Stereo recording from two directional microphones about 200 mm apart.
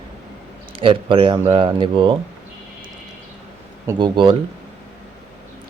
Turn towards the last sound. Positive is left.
turn(degrees=-25)  # may be behind; listen again after turning